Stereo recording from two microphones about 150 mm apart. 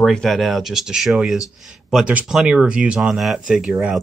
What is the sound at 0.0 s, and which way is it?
Speech, 5° left (ahead or behind).